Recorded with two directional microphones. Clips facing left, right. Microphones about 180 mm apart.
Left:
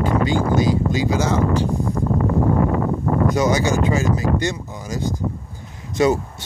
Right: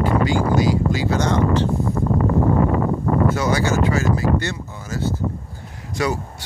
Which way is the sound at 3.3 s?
15° left (ahead or behind).